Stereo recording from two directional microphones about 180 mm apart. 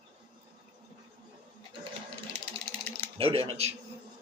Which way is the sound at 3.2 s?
30° right (ahead or behind).